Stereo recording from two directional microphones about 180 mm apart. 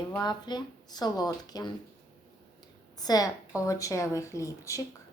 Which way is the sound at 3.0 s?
20° left (ahead or behind).